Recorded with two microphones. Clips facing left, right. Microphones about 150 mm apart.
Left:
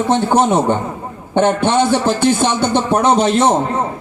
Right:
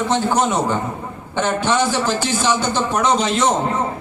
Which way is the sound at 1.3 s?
55° left (ahead or behind).